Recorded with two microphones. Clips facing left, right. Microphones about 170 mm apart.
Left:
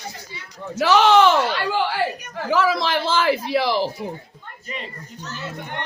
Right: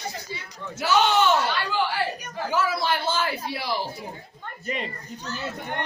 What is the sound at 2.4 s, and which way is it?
Speech, 90° left.